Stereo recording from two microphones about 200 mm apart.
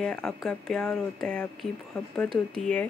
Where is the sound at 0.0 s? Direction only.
5° left (ahead or behind).